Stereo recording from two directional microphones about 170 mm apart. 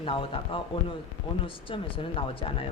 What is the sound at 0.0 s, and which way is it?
A woman's voice, 30° left (ahead or behind).